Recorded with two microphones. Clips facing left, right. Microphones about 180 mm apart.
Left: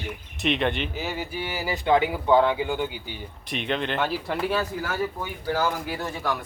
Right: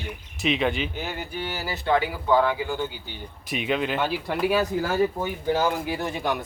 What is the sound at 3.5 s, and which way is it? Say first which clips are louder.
A man's voice: right 2 dB; 5° right (ahead or behind).